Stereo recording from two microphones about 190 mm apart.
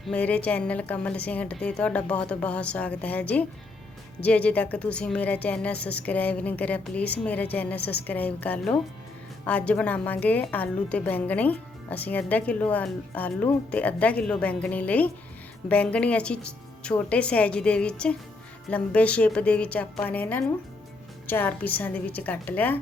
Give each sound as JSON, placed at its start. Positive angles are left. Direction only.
{"t": 0.1, "sound": "a woman's voice", "side_deg": 5}
{"t": 7.8, "sound": "a woman's voice", "side_deg": 60}
{"t": 8.0, "sound": "a woman's voice", "side_deg": 10}